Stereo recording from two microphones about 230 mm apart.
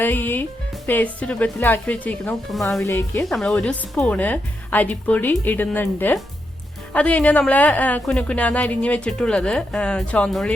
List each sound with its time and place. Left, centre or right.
0.0 s a woman's voice: centre